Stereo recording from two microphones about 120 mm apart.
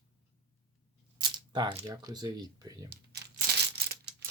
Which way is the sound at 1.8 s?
30° right (ahead or behind).